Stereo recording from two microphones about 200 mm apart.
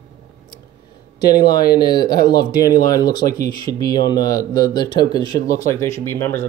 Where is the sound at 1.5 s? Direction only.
50° left (ahead or behind).